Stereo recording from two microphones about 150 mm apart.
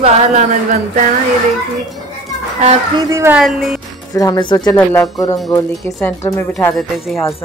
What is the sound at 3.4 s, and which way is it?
Speech, centre (ahead or behind).